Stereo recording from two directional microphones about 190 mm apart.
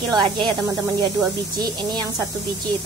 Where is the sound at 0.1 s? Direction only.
20° right (ahead or behind).